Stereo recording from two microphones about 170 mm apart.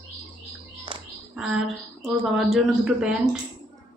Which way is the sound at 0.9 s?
30° right (ahead or behind).